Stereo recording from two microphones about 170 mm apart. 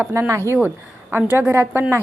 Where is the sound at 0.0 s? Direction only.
15° right (ahead or behind).